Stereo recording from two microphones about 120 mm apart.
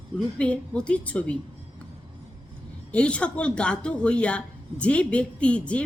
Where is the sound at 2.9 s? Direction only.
10° left (ahead or behind).